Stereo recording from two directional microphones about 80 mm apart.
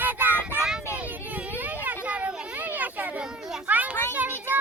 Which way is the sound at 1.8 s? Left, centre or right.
Centre.